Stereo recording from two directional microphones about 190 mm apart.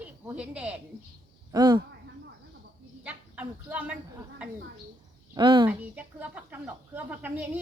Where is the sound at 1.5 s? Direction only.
20° right (ahead or behind).